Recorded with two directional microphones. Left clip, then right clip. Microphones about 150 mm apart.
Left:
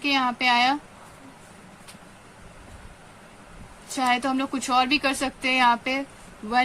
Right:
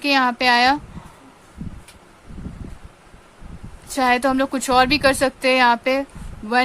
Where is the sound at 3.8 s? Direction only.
45° right (ahead or behind).